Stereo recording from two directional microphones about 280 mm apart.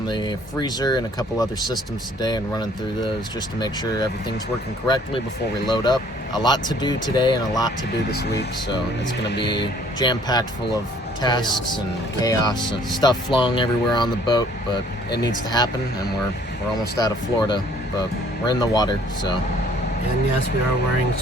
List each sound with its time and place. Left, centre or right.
0.1 s speech: centre
5.6 s speech: centre
8.1 s speech: left
9.5 s speech: centre
17.0 s speech: centre